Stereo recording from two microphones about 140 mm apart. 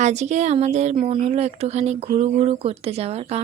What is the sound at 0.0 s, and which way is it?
Speech, 55° right (ahead or behind).